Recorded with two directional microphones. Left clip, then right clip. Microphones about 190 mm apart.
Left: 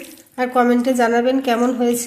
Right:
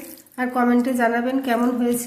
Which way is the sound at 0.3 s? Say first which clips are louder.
Left 4 dB; 45° left (ahead or behind).